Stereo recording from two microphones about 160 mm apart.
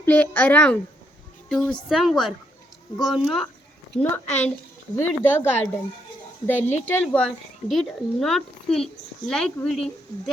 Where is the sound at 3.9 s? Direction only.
10° left (ahead or behind).